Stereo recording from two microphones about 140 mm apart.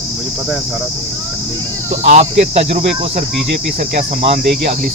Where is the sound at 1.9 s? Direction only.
55° right (ahead or behind).